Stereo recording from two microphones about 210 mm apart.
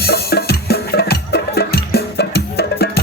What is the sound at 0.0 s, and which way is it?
Music, 50° left (ahead or behind).